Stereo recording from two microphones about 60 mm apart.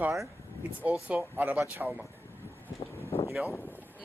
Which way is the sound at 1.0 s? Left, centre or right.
Right.